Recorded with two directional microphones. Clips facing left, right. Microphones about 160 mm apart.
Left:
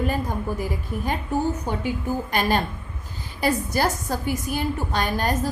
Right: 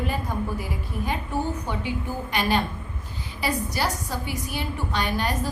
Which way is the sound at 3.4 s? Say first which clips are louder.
Left 4 dB; 45° left (ahead or behind).